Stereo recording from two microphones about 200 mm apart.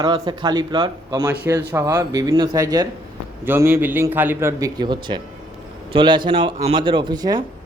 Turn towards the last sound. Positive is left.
turn(degrees=-20)  # may be behind; listen again after turning